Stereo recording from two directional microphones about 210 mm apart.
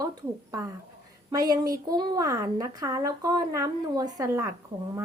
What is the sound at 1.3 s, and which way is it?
A woman's voice, 15° right (ahead or behind).